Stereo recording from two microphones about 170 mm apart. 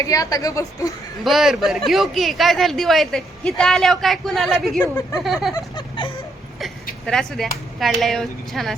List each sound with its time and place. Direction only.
0.0 s a woman's voice: 20° left (ahead or behind)
1.2 s speech: centre (ahead or behind)
4.8 s a woman's voice: 20° left (ahead or behind)
5.2 s speech: centre (ahead or behind)
5.5 s speech: 30° left (ahead or behind)
7.0 s speech: 5° left (ahead or behind)